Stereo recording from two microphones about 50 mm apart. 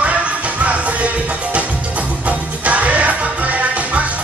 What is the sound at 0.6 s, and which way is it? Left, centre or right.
Music, right.